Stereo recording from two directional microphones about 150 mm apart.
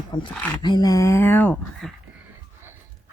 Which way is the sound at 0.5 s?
30° left (ahead or behind).